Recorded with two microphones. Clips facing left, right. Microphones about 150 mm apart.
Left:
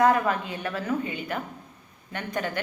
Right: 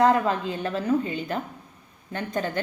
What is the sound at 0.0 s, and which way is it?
A woman's voice, 25° right (ahead or behind).